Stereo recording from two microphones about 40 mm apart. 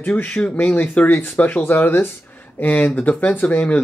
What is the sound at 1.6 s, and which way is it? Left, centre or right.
Speech, left.